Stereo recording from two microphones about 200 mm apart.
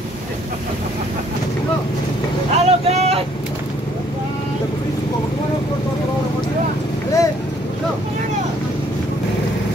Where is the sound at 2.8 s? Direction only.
30° right (ahead or behind).